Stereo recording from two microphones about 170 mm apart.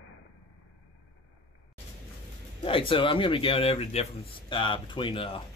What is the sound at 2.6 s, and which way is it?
Speech, 30° left (ahead or behind).